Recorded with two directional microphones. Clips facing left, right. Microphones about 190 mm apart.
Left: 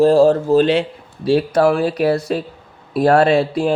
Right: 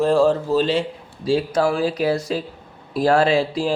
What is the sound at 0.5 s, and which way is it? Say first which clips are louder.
Speech: left 5 dB; 65° left (ahead or behind).